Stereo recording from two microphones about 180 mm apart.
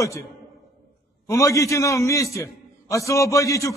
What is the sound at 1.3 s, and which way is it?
A man's voice, 15° left (ahead or behind).